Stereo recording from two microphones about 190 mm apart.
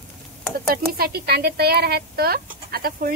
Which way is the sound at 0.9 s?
55° right (ahead or behind).